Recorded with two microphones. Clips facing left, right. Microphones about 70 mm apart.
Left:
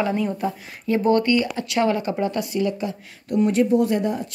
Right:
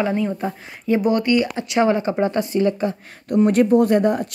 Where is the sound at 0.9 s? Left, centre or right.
Centre.